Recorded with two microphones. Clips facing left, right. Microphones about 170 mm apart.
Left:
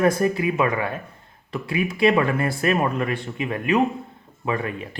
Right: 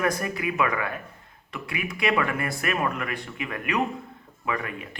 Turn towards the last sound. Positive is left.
turn(degrees=30)  # may be behind; listen again after turning